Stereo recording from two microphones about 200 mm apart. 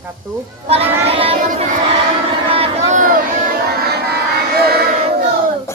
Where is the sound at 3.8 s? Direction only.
50° right (ahead or behind).